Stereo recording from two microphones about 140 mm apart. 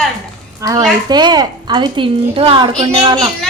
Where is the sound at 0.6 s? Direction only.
25° right (ahead or behind).